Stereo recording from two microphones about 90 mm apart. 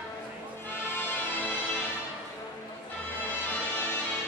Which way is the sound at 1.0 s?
25° left (ahead or behind).